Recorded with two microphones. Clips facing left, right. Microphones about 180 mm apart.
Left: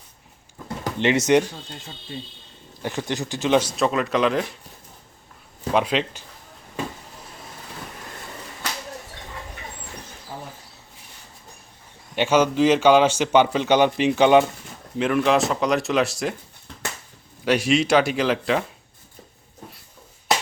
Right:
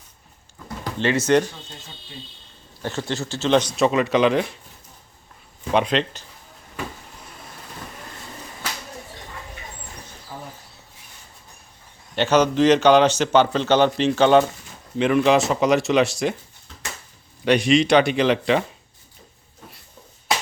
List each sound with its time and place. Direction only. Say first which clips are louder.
0.9 s speech: left 1 dB; 20° left (ahead or behind)
2.8 s speech: even; 15° left (ahead or behind)
3.8 s speech: right 3 dB; centre (ahead or behind)
5.7 s speech: right 1 dB; 5° left (ahead or behind)
12.1 s speech: right 1 dB; 10° left (ahead or behind)
14.9 s speech: right 2 dB; centre (ahead or behind)
17.4 s speech: right 3 dB; 5° left (ahead or behind)